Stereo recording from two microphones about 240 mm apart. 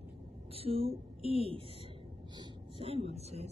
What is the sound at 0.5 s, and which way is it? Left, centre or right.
Speech, right.